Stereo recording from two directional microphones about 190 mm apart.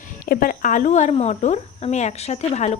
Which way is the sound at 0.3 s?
45° left (ahead or behind).